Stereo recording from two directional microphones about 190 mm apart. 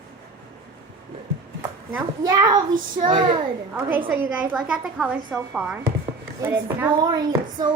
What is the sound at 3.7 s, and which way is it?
A woman's voice, 10° right (ahead or behind).